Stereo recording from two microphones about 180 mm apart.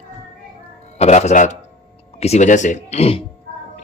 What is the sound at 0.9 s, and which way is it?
Speech, 40° left (ahead or behind).